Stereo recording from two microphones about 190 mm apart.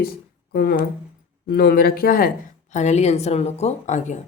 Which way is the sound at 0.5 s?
55° left (ahead or behind).